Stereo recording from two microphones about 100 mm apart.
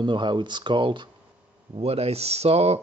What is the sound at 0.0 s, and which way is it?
Speech, 50° right (ahead or behind).